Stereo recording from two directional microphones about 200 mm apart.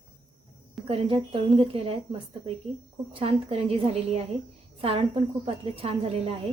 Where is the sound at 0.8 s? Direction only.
30° right (ahead or behind).